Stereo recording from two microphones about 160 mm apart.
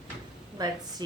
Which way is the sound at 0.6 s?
25° right (ahead or behind).